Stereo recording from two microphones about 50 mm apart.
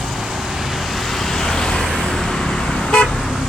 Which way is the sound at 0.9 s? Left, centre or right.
Centre.